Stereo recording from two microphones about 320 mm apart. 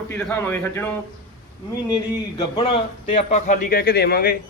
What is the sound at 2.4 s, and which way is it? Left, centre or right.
A man's voice, centre.